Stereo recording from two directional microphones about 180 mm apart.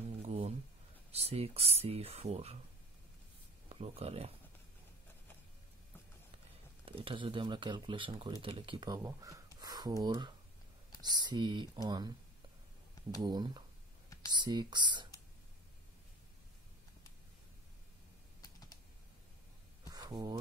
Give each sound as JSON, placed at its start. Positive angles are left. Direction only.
{"t": 0.2, "sound": "a sound", "side_deg": -35}
{"t": 1.1, "sound": "speech", "side_deg": -35}
{"t": 3.6, "sound": "speech", "side_deg": -35}
{"t": 6.9, "sound": "speech", "side_deg": -30}
{"t": 13.2, "sound": "speech", "side_deg": -25}
{"t": 18.4, "sound": "computer keyboard", "side_deg": 20}
{"t": 19.9, "sound": "a sound", "side_deg": -20}